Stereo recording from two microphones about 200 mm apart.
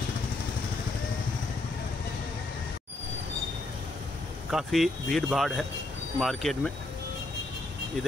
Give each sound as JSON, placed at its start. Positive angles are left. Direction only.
{"t": 4.5, "sound": "speech", "side_deg": 0}